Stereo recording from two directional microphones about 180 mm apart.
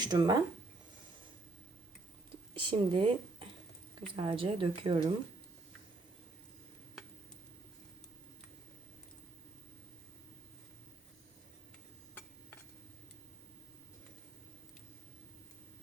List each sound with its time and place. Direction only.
0.0 s a woman's voice: 20° right (ahead or behind)
2.6 s a woman's voice: 30° right (ahead or behind)